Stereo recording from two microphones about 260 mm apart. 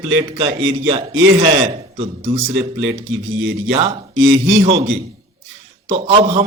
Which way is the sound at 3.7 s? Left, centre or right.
Right.